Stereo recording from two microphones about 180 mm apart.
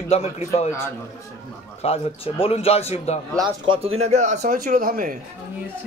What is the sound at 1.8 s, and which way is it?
Speech, 35° left (ahead or behind).